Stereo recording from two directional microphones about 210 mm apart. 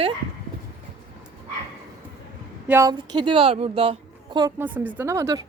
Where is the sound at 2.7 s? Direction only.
15° right (ahead or behind).